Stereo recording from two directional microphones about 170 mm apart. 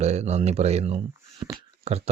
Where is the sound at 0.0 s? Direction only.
40° right (ahead or behind).